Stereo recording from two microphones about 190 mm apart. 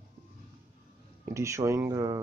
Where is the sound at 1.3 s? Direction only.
15° right (ahead or behind).